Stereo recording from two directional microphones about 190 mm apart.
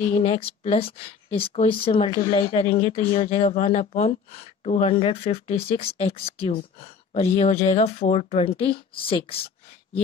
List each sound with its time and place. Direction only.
0.1 s speech: 30° left (ahead or behind)